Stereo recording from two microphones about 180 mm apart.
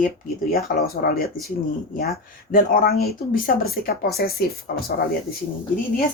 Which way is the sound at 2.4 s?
50° left (ahead or behind).